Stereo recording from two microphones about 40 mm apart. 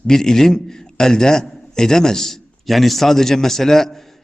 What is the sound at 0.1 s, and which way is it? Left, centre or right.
A man's voice, centre.